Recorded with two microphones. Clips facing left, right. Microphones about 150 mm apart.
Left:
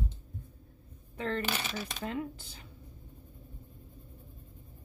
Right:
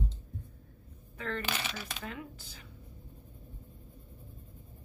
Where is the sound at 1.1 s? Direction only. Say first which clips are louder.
Left 3 dB; 30° left (ahead or behind).